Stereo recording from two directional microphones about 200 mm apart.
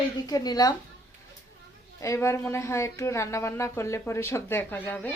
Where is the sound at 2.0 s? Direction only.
15° left (ahead or behind).